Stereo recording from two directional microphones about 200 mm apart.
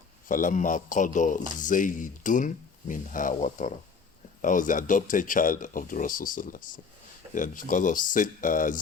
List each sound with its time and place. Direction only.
0.3 s speech: 40° left (ahead or behind)